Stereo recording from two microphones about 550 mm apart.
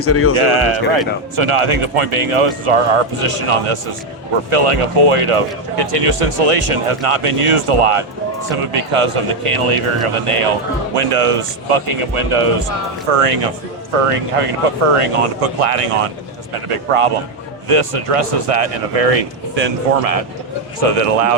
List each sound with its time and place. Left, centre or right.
0.0 s speech: left
0.3 s speech: right
16.6 s speech: right